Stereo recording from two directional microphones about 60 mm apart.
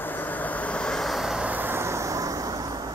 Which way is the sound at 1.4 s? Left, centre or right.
Right.